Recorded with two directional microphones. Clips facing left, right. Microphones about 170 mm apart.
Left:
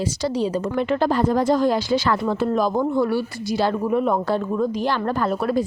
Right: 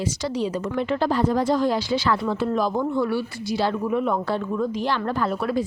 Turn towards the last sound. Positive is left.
turn(degrees=40)  # may be behind; listen again after turning